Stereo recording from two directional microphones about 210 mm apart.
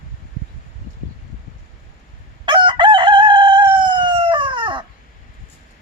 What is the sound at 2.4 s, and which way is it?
Crowing, 20° right (ahead or behind).